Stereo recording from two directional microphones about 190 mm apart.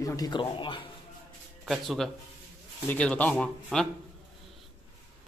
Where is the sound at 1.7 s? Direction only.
Centre (ahead or behind).